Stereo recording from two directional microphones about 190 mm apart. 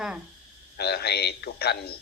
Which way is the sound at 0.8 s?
60° left (ahead or behind).